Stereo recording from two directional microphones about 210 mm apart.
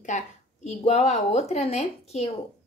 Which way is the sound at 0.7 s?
30° left (ahead or behind).